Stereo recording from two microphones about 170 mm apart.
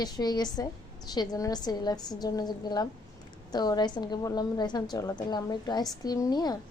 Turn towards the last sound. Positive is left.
turn(degrees=25)  # may be behind; listen again after turning